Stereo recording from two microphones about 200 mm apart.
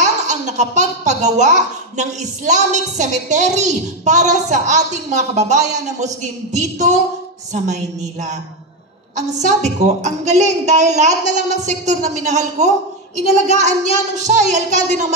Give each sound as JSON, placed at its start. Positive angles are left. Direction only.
{"t": 0.0, "sound": "speech", "side_deg": -35}